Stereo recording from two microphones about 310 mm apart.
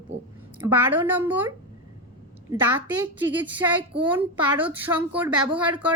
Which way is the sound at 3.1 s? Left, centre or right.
Centre.